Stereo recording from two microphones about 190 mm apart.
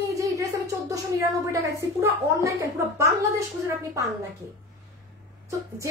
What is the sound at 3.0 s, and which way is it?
A woman's voice, 15° right (ahead or behind).